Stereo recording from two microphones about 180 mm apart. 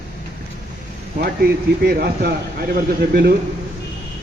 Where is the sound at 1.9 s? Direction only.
60° right (ahead or behind).